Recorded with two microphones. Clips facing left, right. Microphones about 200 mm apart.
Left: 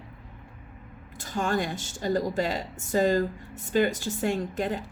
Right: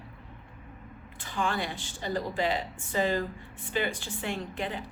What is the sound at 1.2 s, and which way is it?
A woman's voice, 45° left (ahead or behind).